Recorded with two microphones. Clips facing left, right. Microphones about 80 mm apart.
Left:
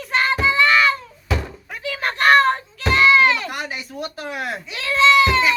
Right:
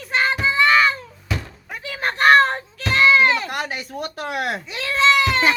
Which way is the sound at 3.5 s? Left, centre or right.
Right.